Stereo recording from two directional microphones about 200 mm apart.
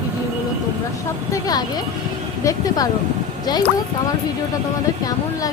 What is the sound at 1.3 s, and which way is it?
Speech, 20° left (ahead or behind).